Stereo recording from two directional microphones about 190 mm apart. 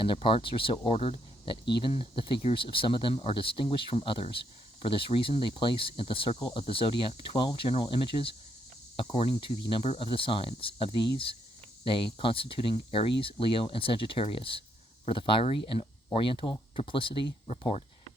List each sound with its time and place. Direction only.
0.0 s speech: 25° left (ahead or behind)